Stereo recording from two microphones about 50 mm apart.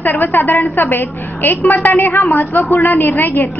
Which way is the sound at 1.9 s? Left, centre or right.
Left.